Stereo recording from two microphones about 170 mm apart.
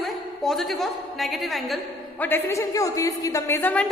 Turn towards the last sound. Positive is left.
turn(degrees=10)  # may be behind; listen again after turning